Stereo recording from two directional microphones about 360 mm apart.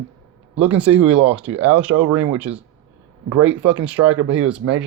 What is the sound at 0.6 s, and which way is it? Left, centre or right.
Speech, centre.